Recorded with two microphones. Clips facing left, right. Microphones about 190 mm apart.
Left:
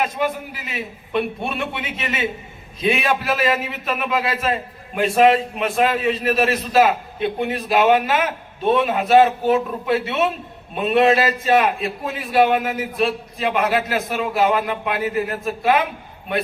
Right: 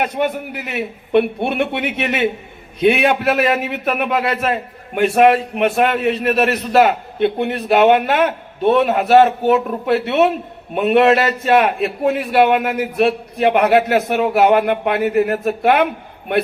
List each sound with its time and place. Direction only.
0.0 s a man's voice: 65° right (ahead or behind)